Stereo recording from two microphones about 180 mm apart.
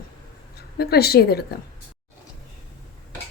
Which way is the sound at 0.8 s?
60° left (ahead or behind).